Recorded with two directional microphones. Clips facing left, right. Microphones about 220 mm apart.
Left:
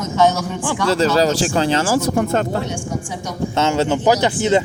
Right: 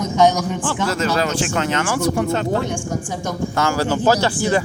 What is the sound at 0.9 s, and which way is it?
Speech, 30° left (ahead or behind).